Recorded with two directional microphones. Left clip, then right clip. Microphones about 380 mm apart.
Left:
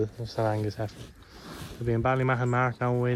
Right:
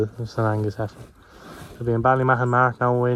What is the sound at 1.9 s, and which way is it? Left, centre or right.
Speech, right.